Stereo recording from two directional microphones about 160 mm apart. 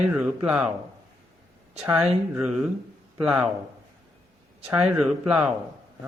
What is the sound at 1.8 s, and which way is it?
Speech, 5° right (ahead or behind).